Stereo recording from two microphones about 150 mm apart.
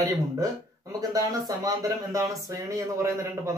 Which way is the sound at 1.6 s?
20° right (ahead or behind).